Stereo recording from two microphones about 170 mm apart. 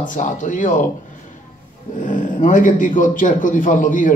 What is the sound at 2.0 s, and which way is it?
Speech, 50° left (ahead or behind).